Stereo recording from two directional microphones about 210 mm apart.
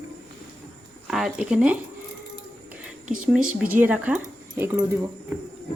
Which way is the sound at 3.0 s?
40° right (ahead or behind).